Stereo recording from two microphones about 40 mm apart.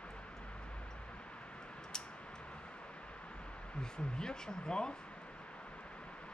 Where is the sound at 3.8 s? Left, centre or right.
Centre.